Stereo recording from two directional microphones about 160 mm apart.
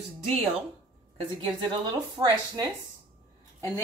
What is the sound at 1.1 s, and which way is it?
A woman's voice, 30° right (ahead or behind).